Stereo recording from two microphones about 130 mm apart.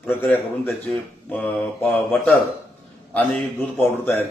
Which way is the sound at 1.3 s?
10° left (ahead or behind).